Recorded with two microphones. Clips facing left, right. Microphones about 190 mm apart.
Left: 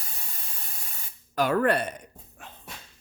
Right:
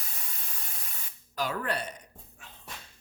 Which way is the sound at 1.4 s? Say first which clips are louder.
Left 9 dB; 60° left (ahead or behind).